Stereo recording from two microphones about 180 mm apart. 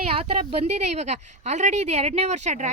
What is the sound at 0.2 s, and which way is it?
Speech, 35° right (ahead or behind).